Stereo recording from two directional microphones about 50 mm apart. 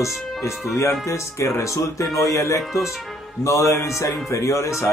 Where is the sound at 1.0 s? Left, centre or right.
Left.